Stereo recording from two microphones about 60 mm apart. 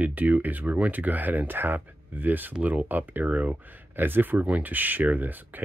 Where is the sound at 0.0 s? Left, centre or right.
Right.